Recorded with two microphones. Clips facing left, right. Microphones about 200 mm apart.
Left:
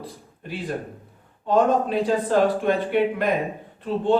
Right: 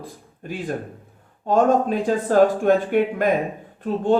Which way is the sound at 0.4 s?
45° right (ahead or behind).